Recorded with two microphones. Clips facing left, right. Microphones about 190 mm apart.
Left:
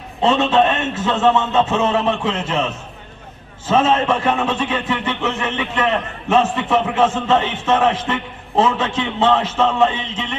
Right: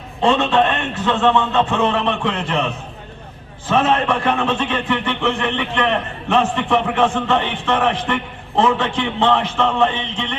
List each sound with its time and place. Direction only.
0.2 s a man's voice: 20° left (ahead or behind)
3.7 s a man's voice: 20° left (ahead or behind)